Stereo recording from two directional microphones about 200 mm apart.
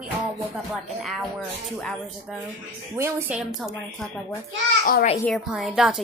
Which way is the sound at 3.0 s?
10° right (ahead or behind).